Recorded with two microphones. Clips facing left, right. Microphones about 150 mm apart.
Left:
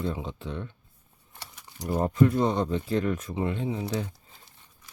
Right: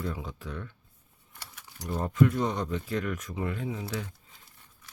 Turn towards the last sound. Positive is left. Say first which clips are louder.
# left 5 dB
turn(degrees=30)  # may be behind; listen again after turning